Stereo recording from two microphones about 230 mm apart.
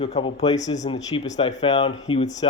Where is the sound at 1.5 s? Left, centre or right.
Left.